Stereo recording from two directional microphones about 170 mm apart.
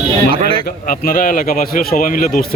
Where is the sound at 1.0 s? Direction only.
55° left (ahead or behind).